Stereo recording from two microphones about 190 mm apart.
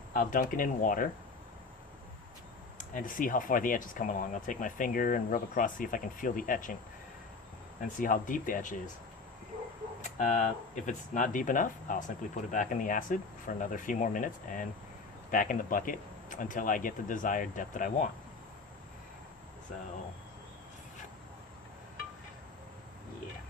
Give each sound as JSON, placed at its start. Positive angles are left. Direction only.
{"t": 0.1, "sound": "speech", "side_deg": 45}
{"t": 2.7, "sound": "speech", "side_deg": 45}
{"t": 7.9, "sound": "speech", "side_deg": 45}
{"t": 10.0, "sound": "speech", "side_deg": 40}